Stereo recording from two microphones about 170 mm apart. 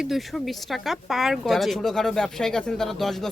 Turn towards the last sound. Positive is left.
turn(degrees=0)  # may be behind; listen again after turning